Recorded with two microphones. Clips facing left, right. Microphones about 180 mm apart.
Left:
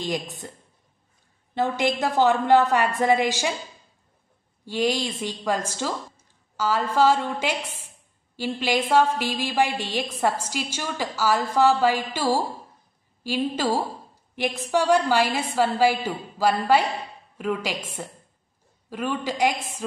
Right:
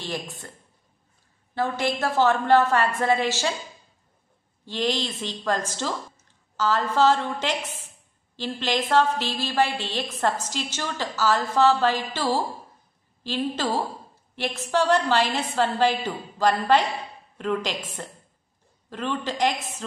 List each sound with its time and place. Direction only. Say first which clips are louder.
0.0 s a woman's voice: left 4 dB; 15° left (ahead or behind)
1.5 s a woman's voice: left 2 dB; 20° left (ahead or behind)
4.6 s a woman's voice: left 2 dB; 10° left (ahead or behind)